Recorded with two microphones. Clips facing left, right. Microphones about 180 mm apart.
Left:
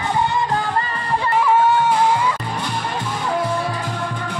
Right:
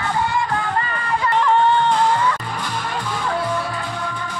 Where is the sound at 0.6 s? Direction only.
35° left (ahead or behind).